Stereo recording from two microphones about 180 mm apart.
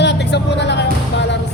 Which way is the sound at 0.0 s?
70° left (ahead or behind).